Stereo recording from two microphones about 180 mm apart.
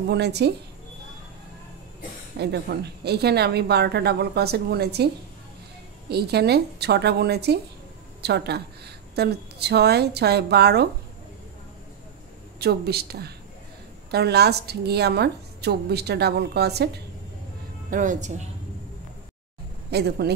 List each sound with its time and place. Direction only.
0.0 s speech: 65° right (ahead or behind)
2.3 s a woman's voice: 65° right (ahead or behind)
12.5 s a woman's voice: 65° right (ahead or behind)
17.8 s a woman's voice: 45° right (ahead or behind)
19.9 s a woman's voice: 65° right (ahead or behind)